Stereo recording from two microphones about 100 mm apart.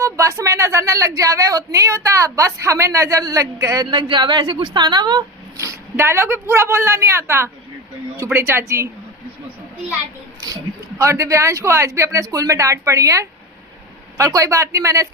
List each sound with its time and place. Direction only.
0.0 s a woman's voice: 30° right (ahead or behind)
3.8 s a woman's voice: 50° right (ahead or behind)
5.5 s a woman's voice: 30° right (ahead or behind)
10.4 s a woman's voice: 35° right (ahead or behind)